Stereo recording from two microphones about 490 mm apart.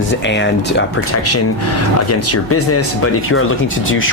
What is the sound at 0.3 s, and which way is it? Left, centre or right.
Speech, left.